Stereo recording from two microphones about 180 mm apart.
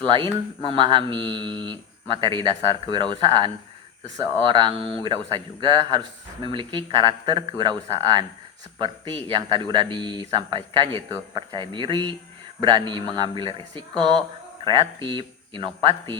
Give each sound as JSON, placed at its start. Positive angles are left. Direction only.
{"t": 0.7, "sound": "speech", "side_deg": -25}
{"t": 14.6, "sound": "speech", "side_deg": -25}